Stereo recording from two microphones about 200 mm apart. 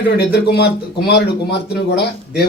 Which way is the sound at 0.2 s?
55° left (ahead or behind).